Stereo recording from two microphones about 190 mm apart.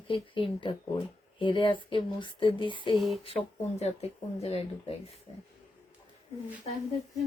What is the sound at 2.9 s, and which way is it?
Speech, centre (ahead or behind).